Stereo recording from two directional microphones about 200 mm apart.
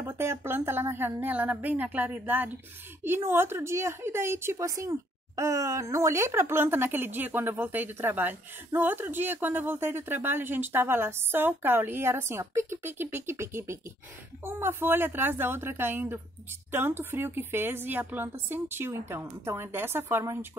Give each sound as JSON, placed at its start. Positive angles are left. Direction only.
{"t": 0.0, "sound": "a woman's voice", "side_deg": -10}